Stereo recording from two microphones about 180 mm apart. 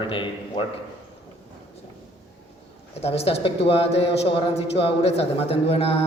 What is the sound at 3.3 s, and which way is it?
A man's voice, 30° left (ahead or behind).